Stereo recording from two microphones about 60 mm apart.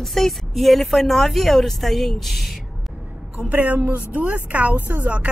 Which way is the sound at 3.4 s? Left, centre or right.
Right.